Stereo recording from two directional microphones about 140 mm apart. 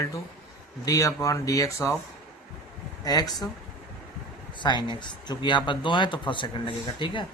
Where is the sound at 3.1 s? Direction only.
30° left (ahead or behind).